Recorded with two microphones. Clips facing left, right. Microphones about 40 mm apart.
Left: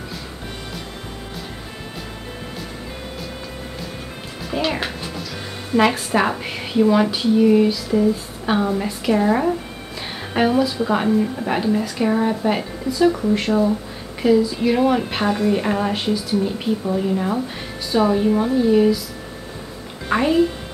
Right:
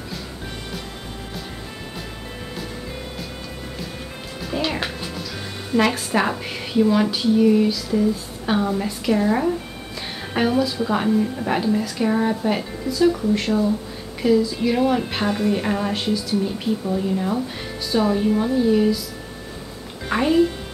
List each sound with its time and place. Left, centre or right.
4.5 s a woman's voice: centre
16.8 s speech: left
17.9 s a woman's voice: centre
20.1 s speech: centre